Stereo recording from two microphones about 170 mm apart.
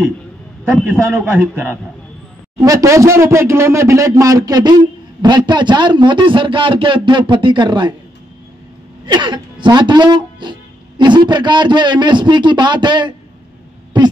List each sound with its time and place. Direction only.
0.7 s a man's voice: 5° left (ahead or behind)
1.1 s a man's voice: 15° right (ahead or behind)
9.0 s speech: 25° right (ahead or behind)